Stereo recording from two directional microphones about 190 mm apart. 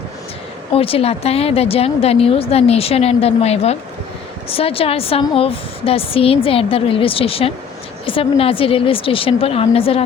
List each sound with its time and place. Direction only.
0.7 s a woman's voice: 30° left (ahead or behind)